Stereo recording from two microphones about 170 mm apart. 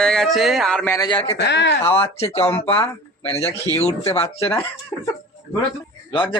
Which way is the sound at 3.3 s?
15° left (ahead or behind).